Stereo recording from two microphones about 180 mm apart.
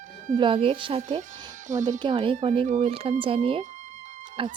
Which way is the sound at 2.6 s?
40° right (ahead or behind).